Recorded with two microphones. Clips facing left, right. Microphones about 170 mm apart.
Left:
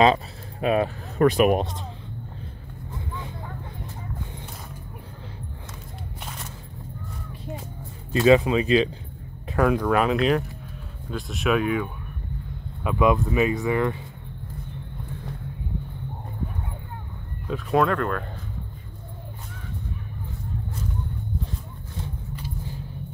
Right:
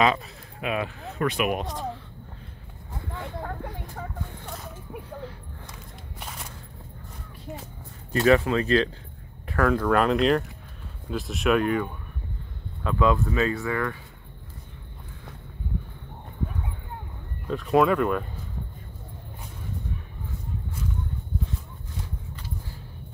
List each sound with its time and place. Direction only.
0.0 s speech: 35° left (ahead or behind)
8.1 s speech: 20° left (ahead or behind)
9.8 s speech: 5° left (ahead or behind)
12.8 s speech: 15° left (ahead or behind)
17.5 s speech: centre (ahead or behind)